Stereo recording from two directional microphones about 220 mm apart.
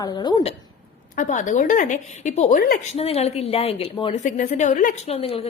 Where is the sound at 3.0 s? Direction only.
25° left (ahead or behind).